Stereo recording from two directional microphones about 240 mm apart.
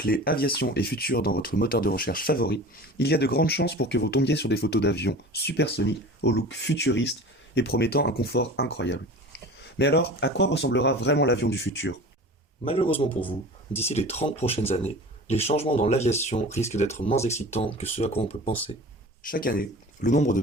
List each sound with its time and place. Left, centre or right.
0.0 s speech: left
12.6 s speech: left
19.3 s speech: left